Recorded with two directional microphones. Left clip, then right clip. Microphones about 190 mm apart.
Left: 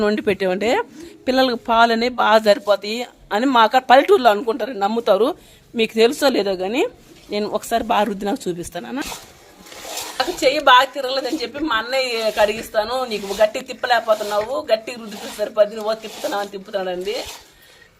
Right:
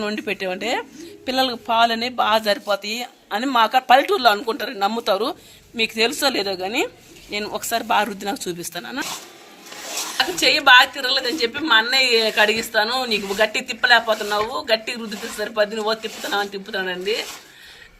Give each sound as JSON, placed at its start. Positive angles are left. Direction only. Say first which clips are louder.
{"t": 0.0, "sound": "speech", "louder": "left 6 dB", "side_deg": 50}
{"t": 10.2, "sound": "a woman's voice", "louder": "even", "side_deg": 55}